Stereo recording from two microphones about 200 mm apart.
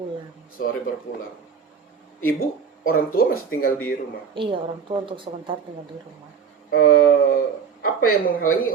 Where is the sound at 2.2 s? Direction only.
45° left (ahead or behind).